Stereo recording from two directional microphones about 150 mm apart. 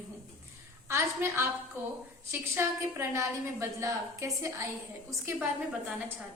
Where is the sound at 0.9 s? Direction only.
15° right (ahead or behind).